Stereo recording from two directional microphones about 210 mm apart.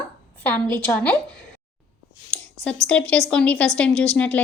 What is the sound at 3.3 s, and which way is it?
A woman's voice, 5° left (ahead or behind).